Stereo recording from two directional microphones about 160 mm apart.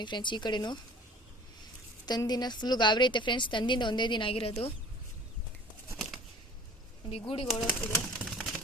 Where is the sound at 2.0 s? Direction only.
25° left (ahead or behind).